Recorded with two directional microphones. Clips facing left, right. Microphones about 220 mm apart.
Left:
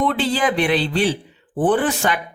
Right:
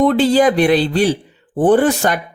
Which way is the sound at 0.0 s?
40° right (ahead or behind).